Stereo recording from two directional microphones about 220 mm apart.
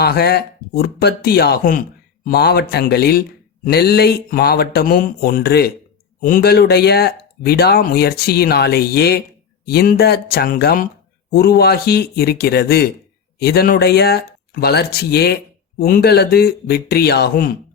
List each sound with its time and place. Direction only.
0.0 s speech: 45° left (ahead or behind)